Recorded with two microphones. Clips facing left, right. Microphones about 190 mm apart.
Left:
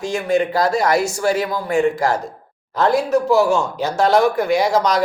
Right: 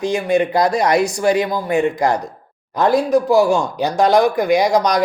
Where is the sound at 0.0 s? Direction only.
15° right (ahead or behind).